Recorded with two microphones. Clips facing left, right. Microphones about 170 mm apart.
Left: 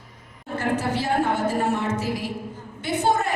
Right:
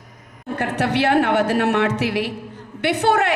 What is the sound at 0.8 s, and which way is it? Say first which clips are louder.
A woman's voice: right 10 dB; 70° right (ahead or behind).